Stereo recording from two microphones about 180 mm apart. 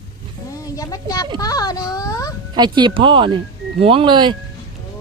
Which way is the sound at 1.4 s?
20° left (ahead or behind).